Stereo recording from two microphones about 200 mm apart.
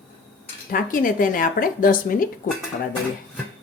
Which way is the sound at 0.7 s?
45° left (ahead or behind).